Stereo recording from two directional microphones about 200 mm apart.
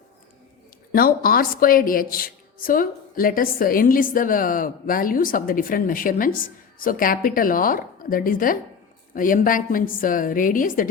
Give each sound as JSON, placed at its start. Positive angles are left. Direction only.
{"t": 0.9, "sound": "a woman's voice", "side_deg": 45}